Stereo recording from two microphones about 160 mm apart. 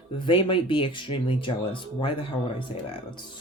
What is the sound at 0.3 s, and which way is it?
Speech, 35° left (ahead or behind).